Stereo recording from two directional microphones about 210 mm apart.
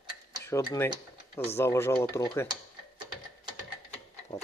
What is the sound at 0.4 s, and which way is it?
Speech, 15° left (ahead or behind).